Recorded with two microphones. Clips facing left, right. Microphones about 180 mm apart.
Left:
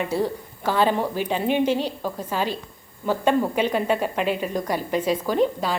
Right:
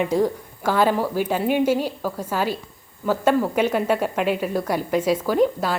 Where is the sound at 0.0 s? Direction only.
15° right (ahead or behind).